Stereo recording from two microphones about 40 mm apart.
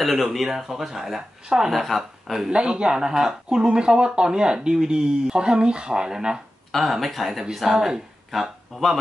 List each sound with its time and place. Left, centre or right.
0.0 s speech: centre
1.7 s speech: centre
2.5 s speech: right
6.7 s speech: centre
8.3 s speech: centre